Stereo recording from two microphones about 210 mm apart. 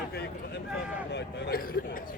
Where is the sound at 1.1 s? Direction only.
55° left (ahead or behind).